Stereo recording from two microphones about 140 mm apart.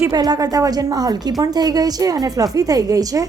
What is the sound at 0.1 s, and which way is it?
A woman's voice, 25° right (ahead or behind).